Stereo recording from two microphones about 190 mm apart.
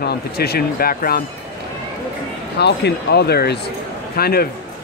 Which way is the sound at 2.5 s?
60° left (ahead or behind).